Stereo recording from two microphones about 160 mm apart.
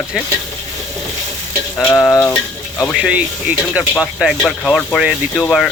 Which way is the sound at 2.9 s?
5° right (ahead or behind).